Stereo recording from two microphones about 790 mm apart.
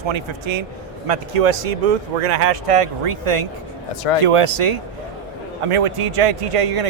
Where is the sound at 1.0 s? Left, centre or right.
Right.